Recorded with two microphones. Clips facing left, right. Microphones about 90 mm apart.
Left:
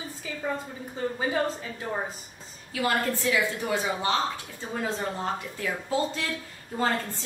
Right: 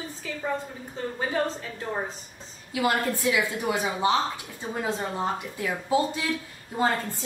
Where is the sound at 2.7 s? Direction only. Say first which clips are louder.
Right 1 dB; 15° right (ahead or behind).